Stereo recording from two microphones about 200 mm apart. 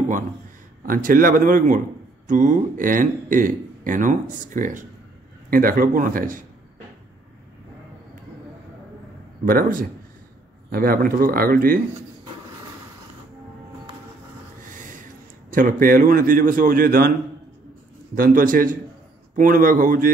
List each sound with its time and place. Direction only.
0.8 s a man's voice: 45° right (ahead or behind)
9.5 s a man's voice: 45° right (ahead or behind)
15.5 s a man's voice: 45° right (ahead or behind)
18.1 s a man's voice: 45° right (ahead or behind)